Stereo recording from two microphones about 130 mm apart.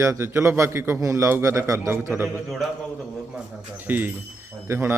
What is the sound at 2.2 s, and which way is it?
Speech, centre (ahead or behind).